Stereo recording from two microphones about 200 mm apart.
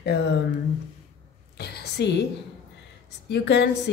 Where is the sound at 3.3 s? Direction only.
55° left (ahead or behind).